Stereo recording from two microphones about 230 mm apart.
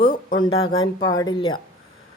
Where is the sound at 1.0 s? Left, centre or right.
Centre.